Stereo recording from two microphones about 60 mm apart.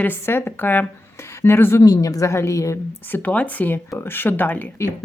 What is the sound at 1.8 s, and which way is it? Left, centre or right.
Speech, left.